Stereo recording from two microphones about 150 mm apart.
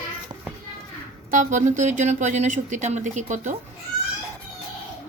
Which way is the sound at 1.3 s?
60° right (ahead or behind).